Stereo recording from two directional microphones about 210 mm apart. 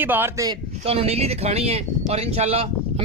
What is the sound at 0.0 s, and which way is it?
Speech, 10° right (ahead or behind).